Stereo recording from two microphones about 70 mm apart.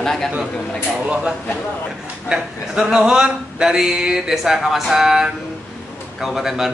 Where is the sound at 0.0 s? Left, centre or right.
Centre.